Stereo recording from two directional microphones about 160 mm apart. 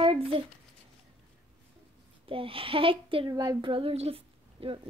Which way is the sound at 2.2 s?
35° right (ahead or behind).